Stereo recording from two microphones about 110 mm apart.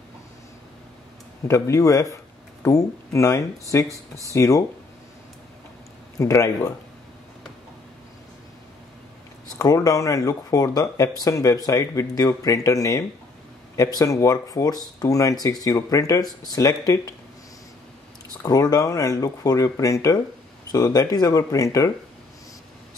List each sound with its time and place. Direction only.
1.5 s speech: 30° left (ahead or behind)
6.1 s speech: 30° left (ahead or behind)
9.6 s speech: 35° left (ahead or behind)
18.4 s speech: 35° left (ahead or behind)